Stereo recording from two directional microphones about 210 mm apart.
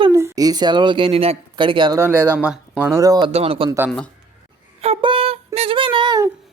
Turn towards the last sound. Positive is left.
turn(degrees=-20)  # may be behind; listen again after turning